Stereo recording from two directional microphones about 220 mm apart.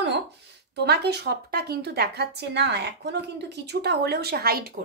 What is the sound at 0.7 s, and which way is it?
Speech, 50° right (ahead or behind).